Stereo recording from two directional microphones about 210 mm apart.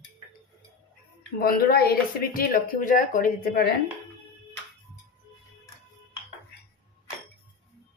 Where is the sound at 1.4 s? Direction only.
45° left (ahead or behind).